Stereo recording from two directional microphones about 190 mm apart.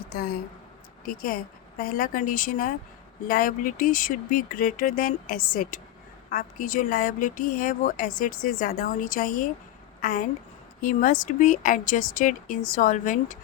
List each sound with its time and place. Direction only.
0.1 s a woman's voice: 50° left (ahead or behind)